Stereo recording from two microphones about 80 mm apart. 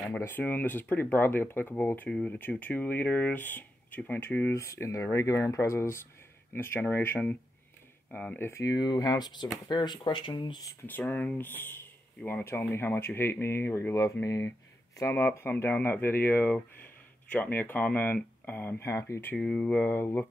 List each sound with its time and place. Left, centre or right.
0.2 s speech: left
2.0 s speech: centre
4.6 s speech: left
8.6 s speech: left
10.9 s speech: left
19.3 s speech: centre